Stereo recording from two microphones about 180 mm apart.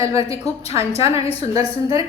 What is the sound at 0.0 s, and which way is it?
Speech, 15° right (ahead or behind).